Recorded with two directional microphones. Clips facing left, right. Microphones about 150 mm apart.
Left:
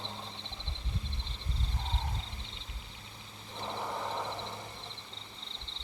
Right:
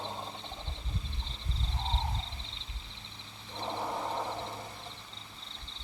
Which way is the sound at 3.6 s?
15° right (ahead or behind).